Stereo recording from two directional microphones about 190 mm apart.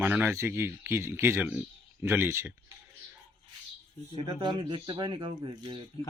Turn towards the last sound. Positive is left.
turn(degrees=-25)  # may be behind; listen again after turning